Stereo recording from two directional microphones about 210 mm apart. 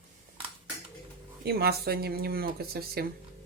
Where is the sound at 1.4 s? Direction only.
50° right (ahead or behind).